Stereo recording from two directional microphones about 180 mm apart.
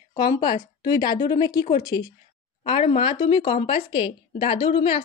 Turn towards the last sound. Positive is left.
turn(degrees=30)  # may be behind; listen again after turning